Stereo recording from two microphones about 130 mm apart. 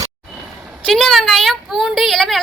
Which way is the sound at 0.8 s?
Centre (ahead or behind).